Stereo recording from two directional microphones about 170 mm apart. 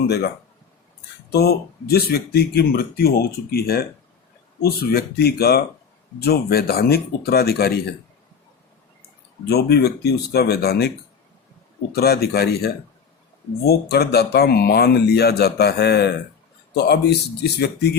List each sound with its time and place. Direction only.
1.3 s speech: 70° left (ahead or behind)
9.5 s speech: 70° left (ahead or behind)